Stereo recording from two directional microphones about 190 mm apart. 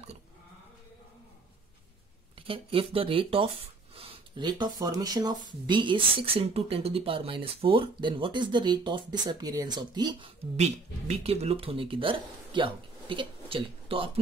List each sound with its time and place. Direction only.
2.3 s speech: 30° right (ahead or behind)
10.5 s speech: 35° right (ahead or behind)